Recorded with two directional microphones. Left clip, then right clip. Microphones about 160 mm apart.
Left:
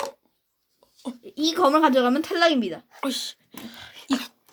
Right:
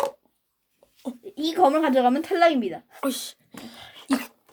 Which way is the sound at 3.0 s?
10° right (ahead or behind).